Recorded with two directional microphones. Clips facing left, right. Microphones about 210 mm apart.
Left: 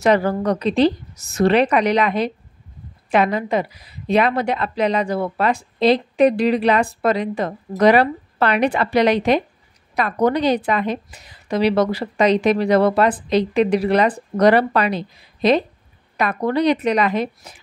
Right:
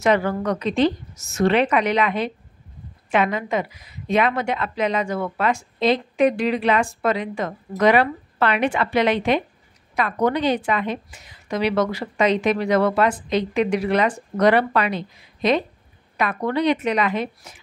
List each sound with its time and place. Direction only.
0.0 s a woman's voice: 35° left (ahead or behind)